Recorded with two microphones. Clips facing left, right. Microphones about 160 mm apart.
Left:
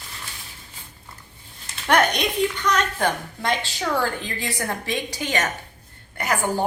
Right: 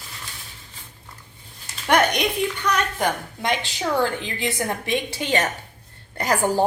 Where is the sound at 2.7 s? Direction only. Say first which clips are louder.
Even; 15° right (ahead or behind).